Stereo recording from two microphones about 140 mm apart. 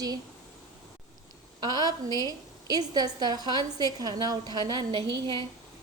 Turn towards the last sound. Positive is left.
turn(degrees=-35)  # may be behind; listen again after turning